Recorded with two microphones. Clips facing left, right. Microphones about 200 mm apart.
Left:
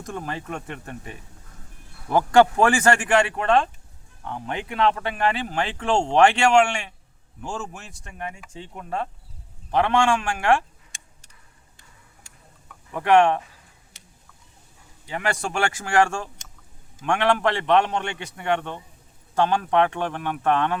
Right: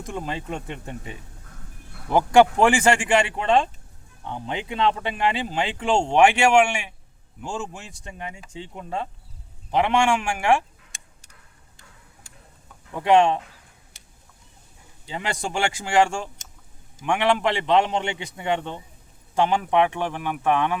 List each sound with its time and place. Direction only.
0.0 s speech: 15° right (ahead or behind)
9.7 s speech: 15° right (ahead or behind)
13.0 s speech: 15° right (ahead or behind)
15.0 s speech: 20° right (ahead or behind)